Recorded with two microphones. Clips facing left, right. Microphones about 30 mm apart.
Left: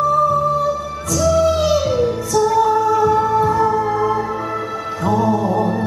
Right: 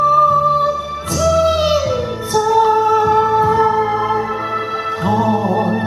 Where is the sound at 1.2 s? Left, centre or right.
Right.